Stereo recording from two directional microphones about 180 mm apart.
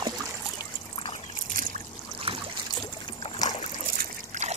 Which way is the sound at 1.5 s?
50° right (ahead or behind).